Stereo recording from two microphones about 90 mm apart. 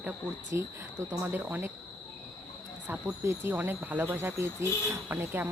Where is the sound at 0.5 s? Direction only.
40° right (ahead or behind).